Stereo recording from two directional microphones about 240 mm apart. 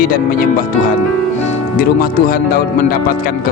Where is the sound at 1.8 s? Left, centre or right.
Left.